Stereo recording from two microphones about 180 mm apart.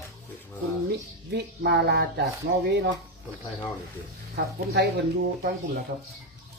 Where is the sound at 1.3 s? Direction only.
70° right (ahead or behind).